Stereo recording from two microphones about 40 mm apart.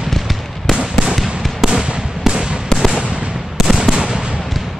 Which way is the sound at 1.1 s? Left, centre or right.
Centre.